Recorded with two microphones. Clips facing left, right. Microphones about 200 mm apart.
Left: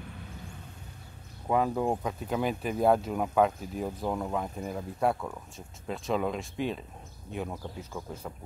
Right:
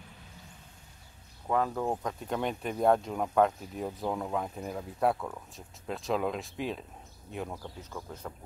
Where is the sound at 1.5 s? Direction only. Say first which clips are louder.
Left 3 dB; 15° left (ahead or behind).